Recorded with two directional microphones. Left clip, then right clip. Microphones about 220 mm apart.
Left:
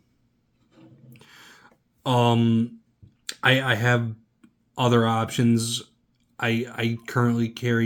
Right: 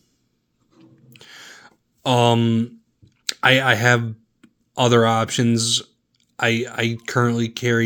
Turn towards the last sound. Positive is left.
turn(degrees=-35)  # may be behind; listen again after turning